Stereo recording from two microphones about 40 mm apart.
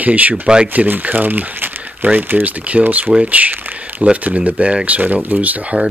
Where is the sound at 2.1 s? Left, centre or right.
Right.